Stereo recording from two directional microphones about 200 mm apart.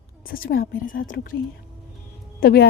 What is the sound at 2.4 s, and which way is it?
Speech, 50° left (ahead or behind).